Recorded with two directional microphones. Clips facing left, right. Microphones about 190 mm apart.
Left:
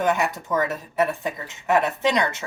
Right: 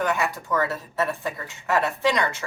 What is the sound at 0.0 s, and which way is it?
Speech, 20° left (ahead or behind).